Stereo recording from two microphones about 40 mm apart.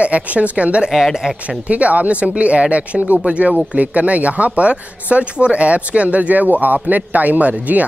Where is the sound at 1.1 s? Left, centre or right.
Centre.